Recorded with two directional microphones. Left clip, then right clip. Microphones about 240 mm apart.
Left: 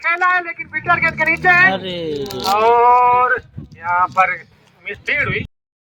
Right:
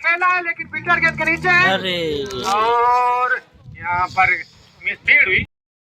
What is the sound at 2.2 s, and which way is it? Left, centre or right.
A man's voice, left.